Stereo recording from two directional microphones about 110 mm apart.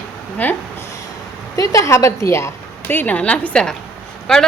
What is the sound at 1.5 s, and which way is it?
A woman's voice, 30° left (ahead or behind).